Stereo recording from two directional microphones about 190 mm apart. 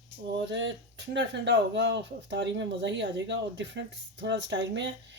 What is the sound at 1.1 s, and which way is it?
Speech, 70° right (ahead or behind).